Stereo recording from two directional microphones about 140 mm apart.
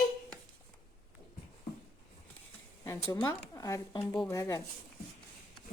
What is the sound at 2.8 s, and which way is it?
Speech, 20° left (ahead or behind).